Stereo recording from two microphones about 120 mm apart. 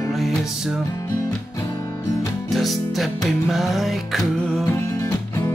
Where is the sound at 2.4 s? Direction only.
Centre (ahead or behind).